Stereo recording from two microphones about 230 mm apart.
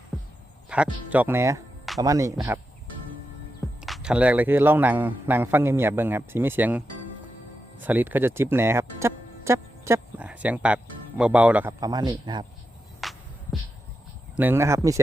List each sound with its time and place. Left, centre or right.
0.1 s heart sounds: centre
0.7 s a man's voice: centre
3.8 s a man's voice: centre
13.0 s music: centre
14.3 s a man's voice: centre